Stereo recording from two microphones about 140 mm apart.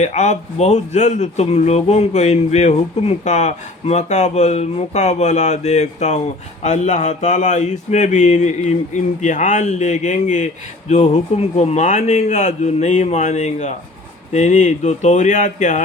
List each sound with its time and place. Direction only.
0.0 s speech: 55° left (ahead or behind)